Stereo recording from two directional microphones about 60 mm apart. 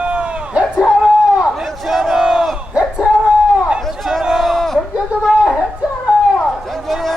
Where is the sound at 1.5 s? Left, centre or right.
Centre.